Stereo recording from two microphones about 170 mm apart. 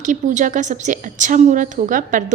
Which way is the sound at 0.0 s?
45° right (ahead or behind).